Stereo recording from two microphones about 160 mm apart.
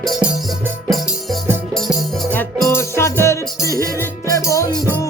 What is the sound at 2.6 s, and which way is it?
Music, 15° left (ahead or behind).